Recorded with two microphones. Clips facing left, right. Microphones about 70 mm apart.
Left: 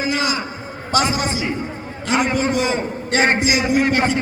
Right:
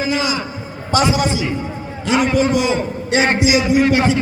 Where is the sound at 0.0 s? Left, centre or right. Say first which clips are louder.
Right 2 dB; left.